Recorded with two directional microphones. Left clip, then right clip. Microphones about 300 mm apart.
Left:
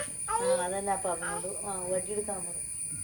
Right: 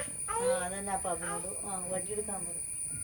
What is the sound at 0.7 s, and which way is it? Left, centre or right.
Speech, left.